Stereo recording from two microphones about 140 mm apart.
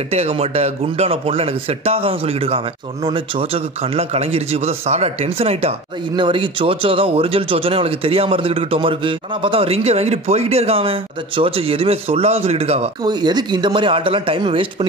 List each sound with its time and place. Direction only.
0.1 s speech: 45° right (ahead or behind)
13.0 s speech: 30° right (ahead or behind)